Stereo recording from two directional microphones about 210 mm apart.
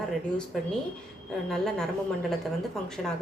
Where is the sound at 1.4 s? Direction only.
Centre (ahead or behind).